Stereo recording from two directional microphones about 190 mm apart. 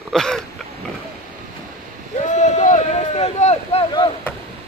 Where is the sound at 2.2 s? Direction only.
40° left (ahead or behind).